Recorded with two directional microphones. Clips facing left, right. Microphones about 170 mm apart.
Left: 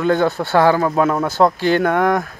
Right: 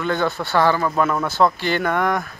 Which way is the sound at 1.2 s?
45° left (ahead or behind).